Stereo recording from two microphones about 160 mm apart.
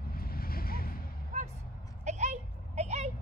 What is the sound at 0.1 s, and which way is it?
Vehicle, 70° left (ahead or behind).